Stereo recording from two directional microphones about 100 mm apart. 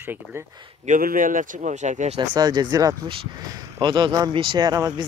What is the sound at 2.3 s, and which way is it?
Speech, 45° right (ahead or behind).